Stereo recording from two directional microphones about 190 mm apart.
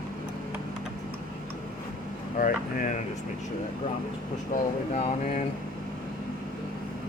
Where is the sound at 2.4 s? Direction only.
45° left (ahead or behind).